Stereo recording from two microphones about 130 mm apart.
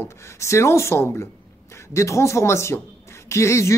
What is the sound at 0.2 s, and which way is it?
Speech, 20° left (ahead or behind).